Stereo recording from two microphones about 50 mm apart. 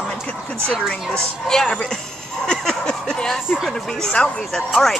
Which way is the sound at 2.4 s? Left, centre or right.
Centre.